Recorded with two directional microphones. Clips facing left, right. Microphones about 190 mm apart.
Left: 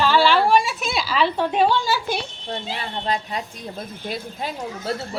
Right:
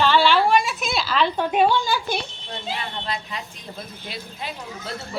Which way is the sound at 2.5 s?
40° left (ahead or behind).